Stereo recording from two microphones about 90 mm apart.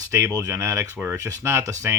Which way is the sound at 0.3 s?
40° right (ahead or behind).